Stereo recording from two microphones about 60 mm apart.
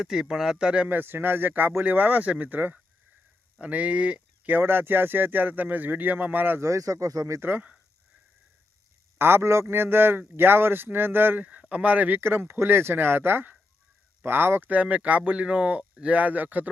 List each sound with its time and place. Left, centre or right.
0.0 s speech: centre
0.9 s a man's voice: right
4.5 s a man's voice: right
6.6 s speech: right
7.3 s a man's voice: right
9.1 s a man's voice: right
11.7 s a man's voice: right